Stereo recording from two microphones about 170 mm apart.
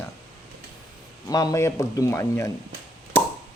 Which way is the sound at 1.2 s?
20° left (ahead or behind).